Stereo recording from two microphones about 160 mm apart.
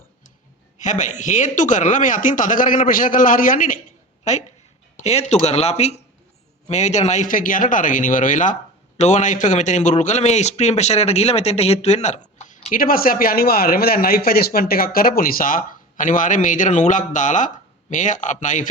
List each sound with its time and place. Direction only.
0.8 s a man's voice: 50° left (ahead or behind)
4.2 s a woman's voice: 45° left (ahead or behind)